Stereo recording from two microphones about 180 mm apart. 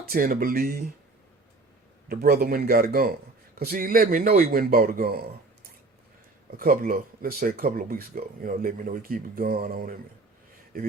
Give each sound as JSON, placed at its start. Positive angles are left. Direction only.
{"t": 0.1, "sound": "speech", "side_deg": -50}
{"t": 2.0, "sound": "a man's voice", "side_deg": -55}
{"t": 6.6, "sound": "speech", "side_deg": -55}